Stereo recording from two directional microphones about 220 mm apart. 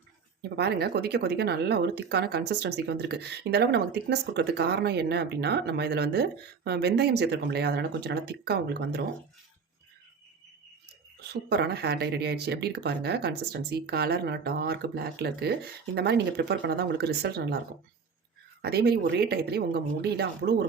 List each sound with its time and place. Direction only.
0.5 s speech: 45° right (ahead or behind)
11.2 s speech: 50° right (ahead or behind)
18.6 s speech: 45° right (ahead or behind)